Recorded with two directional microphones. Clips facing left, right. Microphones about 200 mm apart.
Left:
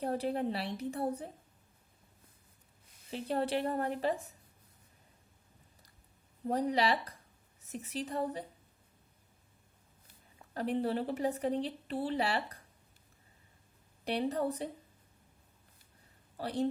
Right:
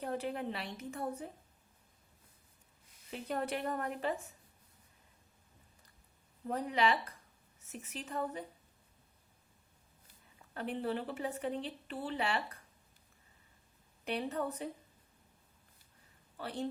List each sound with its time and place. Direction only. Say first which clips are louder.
0.0 s speech: left 4 dB; 35° left (ahead or behind)
3.1 s speech: left 4 dB; 30° left (ahead or behind)
6.5 s speech: left 2 dB; 35° left (ahead or behind)
10.5 s speech: left 4 dB; 35° left (ahead or behind)
14.0 s speech: left 4 dB; 35° left (ahead or behind)
16.4 s speech: left 6 dB; 35° left (ahead or behind)